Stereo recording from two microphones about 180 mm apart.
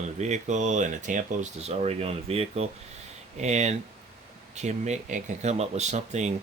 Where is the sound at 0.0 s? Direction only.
40° right (ahead or behind).